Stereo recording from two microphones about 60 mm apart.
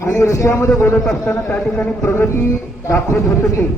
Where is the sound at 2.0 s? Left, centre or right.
Left.